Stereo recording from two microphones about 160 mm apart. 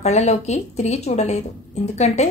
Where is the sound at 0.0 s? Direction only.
45° left (ahead or behind).